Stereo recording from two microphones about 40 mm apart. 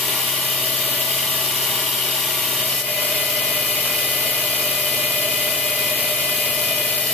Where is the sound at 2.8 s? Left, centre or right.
Left.